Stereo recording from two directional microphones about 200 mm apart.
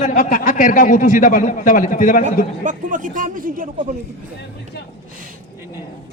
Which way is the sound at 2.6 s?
40° right (ahead or behind).